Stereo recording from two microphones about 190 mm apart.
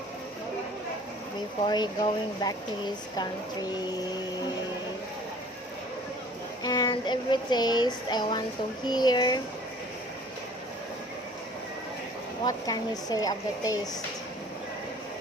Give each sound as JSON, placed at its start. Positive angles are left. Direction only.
{"t": 1.6, "sound": "speech", "side_deg": 25}
{"t": 6.6, "sound": "speech", "side_deg": 20}
{"t": 12.5, "sound": "speech", "side_deg": 20}